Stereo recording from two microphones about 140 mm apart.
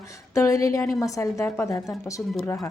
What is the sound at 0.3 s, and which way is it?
Speech, 25° left (ahead or behind).